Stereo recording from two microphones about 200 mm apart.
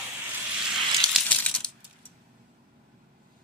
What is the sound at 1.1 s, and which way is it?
Coin, 5° left (ahead or behind).